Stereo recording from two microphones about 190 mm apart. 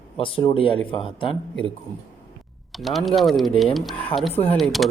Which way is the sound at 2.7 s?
Centre (ahead or behind).